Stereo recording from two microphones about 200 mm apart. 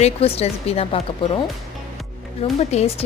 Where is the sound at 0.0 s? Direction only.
30° left (ahead or behind).